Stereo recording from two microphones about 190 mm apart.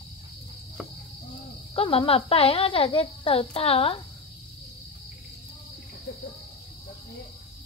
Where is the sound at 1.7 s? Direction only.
30° left (ahead or behind).